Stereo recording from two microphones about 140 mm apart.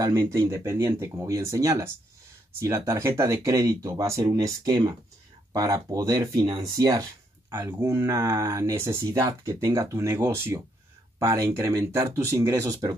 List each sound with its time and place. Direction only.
0.0 s speech: 20° right (ahead or behind)
6.4 s speech: 35° right (ahead or behind)
6.8 s speech: 25° right (ahead or behind)